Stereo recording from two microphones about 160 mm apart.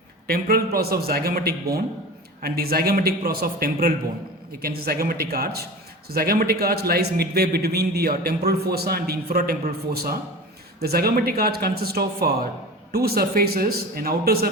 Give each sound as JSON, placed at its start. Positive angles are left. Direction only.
{"t": 0.3, "sound": "a man's voice", "side_deg": -70}